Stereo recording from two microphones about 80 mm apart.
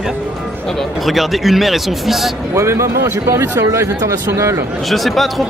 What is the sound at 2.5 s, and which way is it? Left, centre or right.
Speech, right.